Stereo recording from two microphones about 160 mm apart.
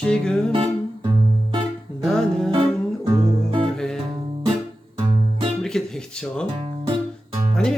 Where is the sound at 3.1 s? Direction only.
30° right (ahead or behind).